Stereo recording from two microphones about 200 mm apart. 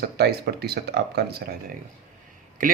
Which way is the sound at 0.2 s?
50° right (ahead or behind).